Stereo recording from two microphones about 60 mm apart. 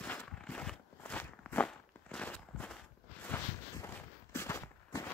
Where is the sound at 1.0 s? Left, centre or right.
Left.